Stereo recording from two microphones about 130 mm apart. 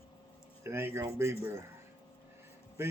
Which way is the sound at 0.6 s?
20° right (ahead or behind).